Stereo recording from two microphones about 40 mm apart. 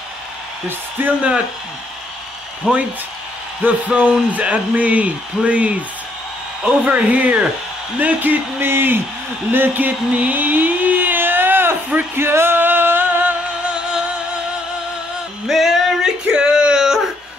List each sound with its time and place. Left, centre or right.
1.0 s speech: right
2.6 s speech: right
3.6 s speech: right
8.0 s speech: right
8.6 s speech: right
9.5 s speech: right
10.3 s a sound: right
12.2 s music: right
15.4 s music: centre
16.0 s a sound: right